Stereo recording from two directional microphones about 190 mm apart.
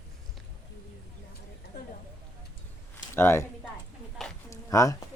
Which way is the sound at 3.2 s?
10° left (ahead or behind).